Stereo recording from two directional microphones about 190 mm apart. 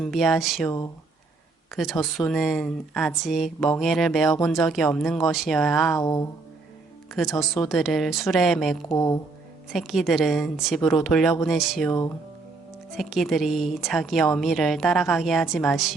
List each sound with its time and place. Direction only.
0.0 s a woman's voice: centre (ahead or behind)
1.7 s a woman's voice: centre (ahead or behind)
6.0 s a sound: 20° left (ahead or behind)
7.3 s a woman's voice: centre (ahead or behind)
11.9 s a sound: 15° left (ahead or behind)
13.0 s a woman's voice: centre (ahead or behind)